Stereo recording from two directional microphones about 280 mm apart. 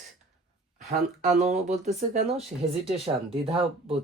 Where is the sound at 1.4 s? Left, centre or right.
Right.